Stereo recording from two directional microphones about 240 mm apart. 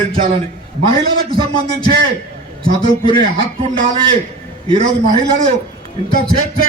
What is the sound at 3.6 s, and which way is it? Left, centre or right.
Speech, right.